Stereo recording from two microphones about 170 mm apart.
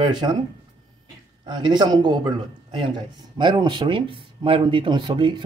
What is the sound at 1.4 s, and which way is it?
Speech, 25° right (ahead or behind).